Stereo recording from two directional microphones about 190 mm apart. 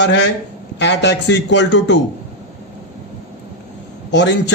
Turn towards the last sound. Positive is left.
turn(degrees=65)  # may be behind; listen again after turning